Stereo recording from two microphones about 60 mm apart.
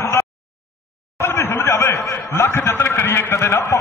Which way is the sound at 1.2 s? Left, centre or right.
Left.